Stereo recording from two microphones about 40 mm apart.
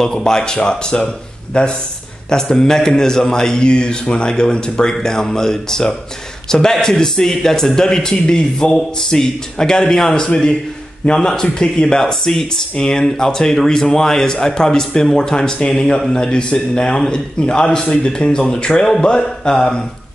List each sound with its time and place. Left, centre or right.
0.0 s a man's voice: centre